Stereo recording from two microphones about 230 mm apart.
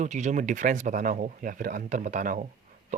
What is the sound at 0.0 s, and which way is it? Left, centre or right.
Speech, right.